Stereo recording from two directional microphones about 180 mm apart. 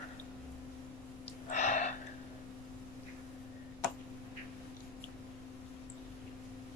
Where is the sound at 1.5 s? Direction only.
40° left (ahead or behind).